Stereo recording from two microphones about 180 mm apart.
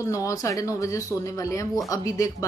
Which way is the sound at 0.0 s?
15° left (ahead or behind).